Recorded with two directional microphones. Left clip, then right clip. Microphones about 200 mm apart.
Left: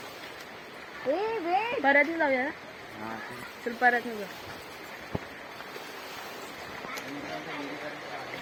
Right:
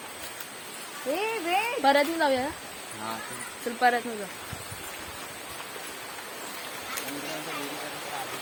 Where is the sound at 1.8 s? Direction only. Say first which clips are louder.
Right 1 dB; 30° right (ahead or behind).